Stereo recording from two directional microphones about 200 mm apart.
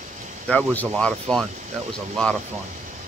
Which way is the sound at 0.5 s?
5° left (ahead or behind).